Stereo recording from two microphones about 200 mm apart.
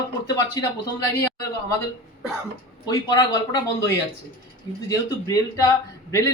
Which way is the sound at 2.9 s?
20° left (ahead or behind).